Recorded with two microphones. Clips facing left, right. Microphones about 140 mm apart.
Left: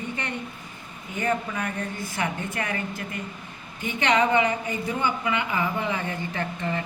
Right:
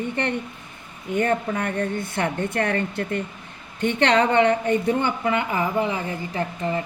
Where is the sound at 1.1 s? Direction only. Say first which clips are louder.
Right 5 dB; 60° right (ahead or behind).